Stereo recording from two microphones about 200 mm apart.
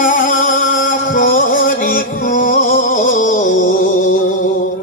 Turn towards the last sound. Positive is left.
turn(degrees=45)  # may be behind; listen again after turning